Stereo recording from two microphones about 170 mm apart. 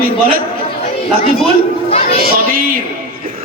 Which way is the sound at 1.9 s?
35° left (ahead or behind).